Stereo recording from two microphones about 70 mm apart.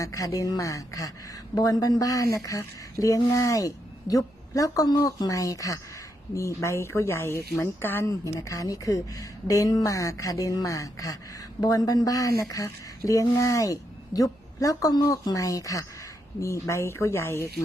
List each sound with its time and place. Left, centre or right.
0.0 s a woman's voice: left
8.2 s speech: left